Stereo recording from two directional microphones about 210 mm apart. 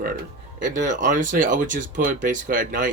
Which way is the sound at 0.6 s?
35° right (ahead or behind).